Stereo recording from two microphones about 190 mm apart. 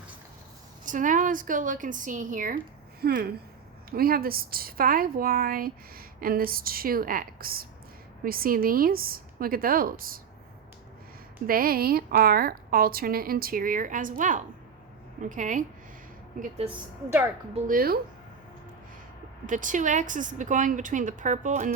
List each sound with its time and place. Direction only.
0.9 s a woman's voice: 45° right (ahead or behind)
11.4 s a woman's voice: 50° right (ahead or behind); by 16.7 s 35° right (ahead or behind)
17.7 s a woman's voice: 50° right (ahead or behind)
19.5 s a woman's voice: 45° right (ahead or behind)